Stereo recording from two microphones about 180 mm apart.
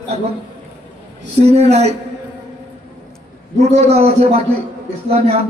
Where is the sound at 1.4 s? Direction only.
35° right (ahead or behind).